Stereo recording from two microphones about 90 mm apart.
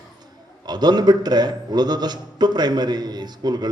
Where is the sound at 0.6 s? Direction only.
50° right (ahead or behind).